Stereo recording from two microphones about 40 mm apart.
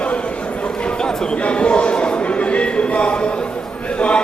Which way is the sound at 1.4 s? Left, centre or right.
Left.